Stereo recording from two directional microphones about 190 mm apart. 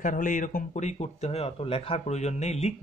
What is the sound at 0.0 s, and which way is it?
Speech, 45° left (ahead or behind).